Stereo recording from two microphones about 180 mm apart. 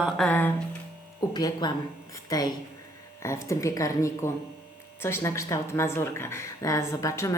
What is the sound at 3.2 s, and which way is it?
A woman's voice, 15° left (ahead or behind).